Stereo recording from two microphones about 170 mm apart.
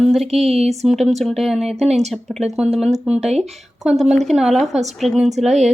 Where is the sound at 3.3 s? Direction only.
40° right (ahead or behind).